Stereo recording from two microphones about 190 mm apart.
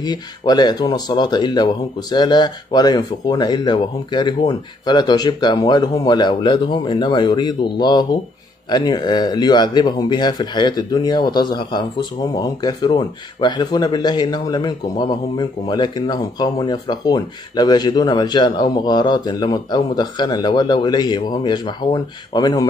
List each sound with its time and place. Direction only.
0.0 s speech: 20° left (ahead or behind)